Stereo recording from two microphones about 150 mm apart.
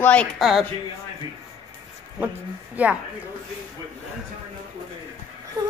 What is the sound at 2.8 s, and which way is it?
Speech, 10° right (ahead or behind).